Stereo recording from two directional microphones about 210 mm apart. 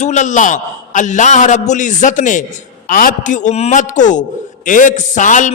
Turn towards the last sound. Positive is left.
turn(degrees=35)  # may be behind; listen again after turning